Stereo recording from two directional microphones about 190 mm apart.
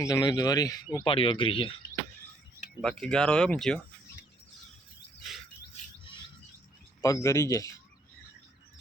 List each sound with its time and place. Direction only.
0.0 s speech: 20° left (ahead or behind)
1.0 s speech: 30° left (ahead or behind)
3.0 s speech: 5° left (ahead or behind)
7.0 s speech: 15° left (ahead or behind)